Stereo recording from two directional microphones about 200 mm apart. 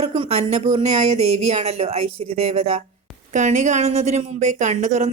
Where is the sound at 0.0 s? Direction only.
30° right (ahead or behind).